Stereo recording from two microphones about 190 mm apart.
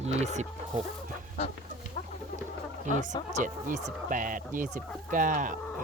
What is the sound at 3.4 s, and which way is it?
Speech, 40° right (ahead or behind).